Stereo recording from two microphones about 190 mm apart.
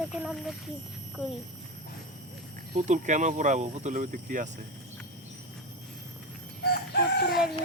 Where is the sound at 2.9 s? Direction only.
40° right (ahead or behind).